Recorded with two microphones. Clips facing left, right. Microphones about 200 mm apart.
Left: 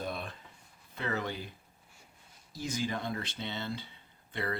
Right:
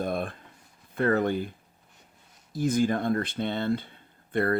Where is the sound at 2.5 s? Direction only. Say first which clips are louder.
Right 10 dB; 55° right (ahead or behind).